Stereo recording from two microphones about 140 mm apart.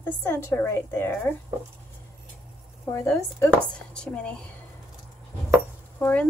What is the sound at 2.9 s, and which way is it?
Speech, 15° left (ahead or behind).